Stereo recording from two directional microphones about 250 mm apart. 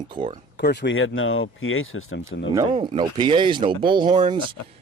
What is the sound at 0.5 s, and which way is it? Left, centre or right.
Speech, left.